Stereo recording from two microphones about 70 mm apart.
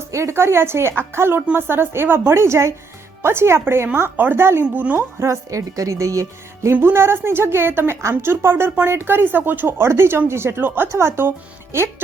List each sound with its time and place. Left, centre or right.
0.1 s speech: right
4.9 s a woman's voice: right
6.7 s speech: right